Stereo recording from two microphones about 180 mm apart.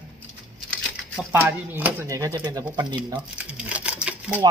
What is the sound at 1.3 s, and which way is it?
Speech, 10° right (ahead or behind).